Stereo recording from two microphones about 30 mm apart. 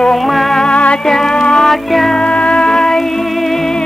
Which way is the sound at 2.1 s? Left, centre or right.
Left.